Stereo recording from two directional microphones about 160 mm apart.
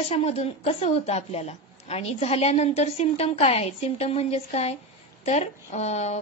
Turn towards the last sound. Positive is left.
turn(degrees=45)  # may be behind; listen again after turning